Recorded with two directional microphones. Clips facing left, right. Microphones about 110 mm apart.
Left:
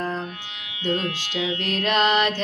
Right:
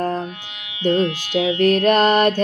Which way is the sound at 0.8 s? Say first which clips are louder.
Right 7 dB; 20° right (ahead or behind).